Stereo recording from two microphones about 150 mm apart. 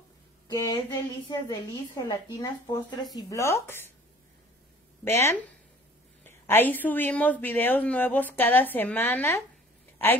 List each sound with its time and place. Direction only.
0.5 s a woman's voice: 20° left (ahead or behind)
5.0 s speech: 20° left (ahead or behind)